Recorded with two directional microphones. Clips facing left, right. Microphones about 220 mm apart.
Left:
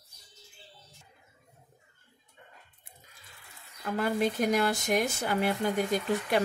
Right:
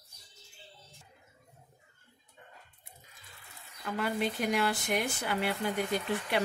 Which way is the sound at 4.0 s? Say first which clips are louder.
Left 4 dB; 45° left (ahead or behind).